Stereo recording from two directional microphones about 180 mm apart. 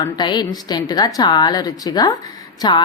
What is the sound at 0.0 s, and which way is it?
A woman's voice, 25° left (ahead or behind).